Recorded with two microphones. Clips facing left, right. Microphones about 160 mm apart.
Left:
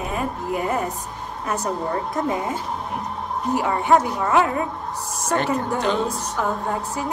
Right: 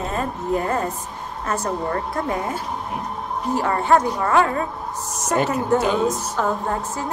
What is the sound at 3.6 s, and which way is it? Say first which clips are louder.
A woman's voice: even; 15° left (ahead or behind).